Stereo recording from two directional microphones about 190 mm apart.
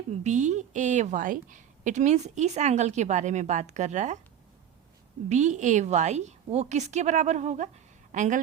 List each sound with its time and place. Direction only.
0.1 s a woman's voice: 35° right (ahead or behind)
5.3 s a woman's voice: 40° right (ahead or behind)